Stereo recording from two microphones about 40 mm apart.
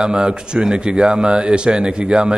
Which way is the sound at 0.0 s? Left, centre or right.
Right.